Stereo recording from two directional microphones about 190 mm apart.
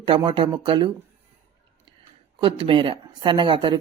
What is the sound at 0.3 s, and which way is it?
Speech, 25° right (ahead or behind).